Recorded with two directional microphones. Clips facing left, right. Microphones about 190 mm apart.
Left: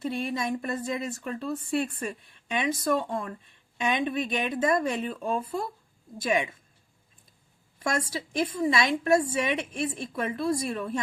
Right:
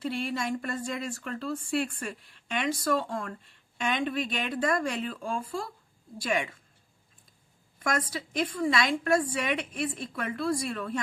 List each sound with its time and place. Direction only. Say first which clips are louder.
0.0 s speech: left 1 dB; 20° left (ahead or behind)
7.8 s speech: left 1 dB; 25° left (ahead or behind)